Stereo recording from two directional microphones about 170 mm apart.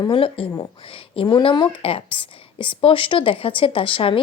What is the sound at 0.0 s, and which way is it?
A woman's voice, 30° left (ahead or behind).